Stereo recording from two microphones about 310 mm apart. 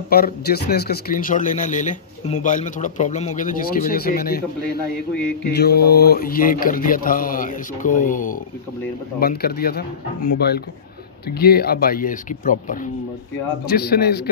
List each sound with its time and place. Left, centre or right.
0.1 s speech: left
5.5 s a man's voice: left